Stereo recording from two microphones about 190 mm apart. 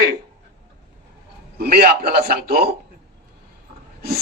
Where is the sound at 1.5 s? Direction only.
55° right (ahead or behind).